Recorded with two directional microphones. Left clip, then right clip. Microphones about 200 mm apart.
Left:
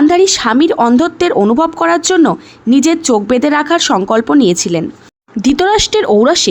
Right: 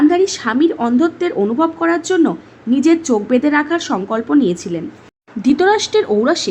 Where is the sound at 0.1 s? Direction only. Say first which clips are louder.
Left 6 dB; 45° left (ahead or behind).